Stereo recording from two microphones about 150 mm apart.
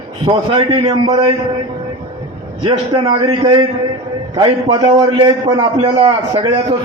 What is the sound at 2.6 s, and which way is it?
A man's voice, 30° right (ahead or behind).